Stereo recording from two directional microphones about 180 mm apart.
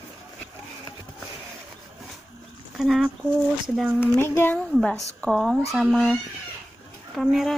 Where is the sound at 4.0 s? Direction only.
15° left (ahead or behind).